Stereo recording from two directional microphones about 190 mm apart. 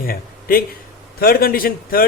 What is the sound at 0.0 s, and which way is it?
A man's voice, 50° left (ahead or behind).